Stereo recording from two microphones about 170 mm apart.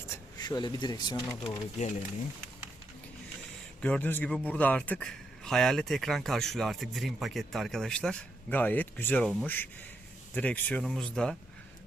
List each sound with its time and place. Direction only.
0.1 s speech: 25° left (ahead or behind)
3.8 s a man's voice: 5° left (ahead or behind)